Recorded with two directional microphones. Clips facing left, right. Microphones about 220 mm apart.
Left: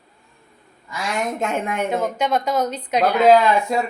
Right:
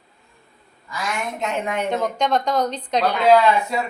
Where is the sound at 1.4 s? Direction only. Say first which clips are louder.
Left 1 dB; 50° left (ahead or behind).